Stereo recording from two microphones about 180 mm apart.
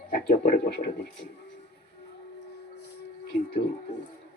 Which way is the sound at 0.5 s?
60° left (ahead or behind).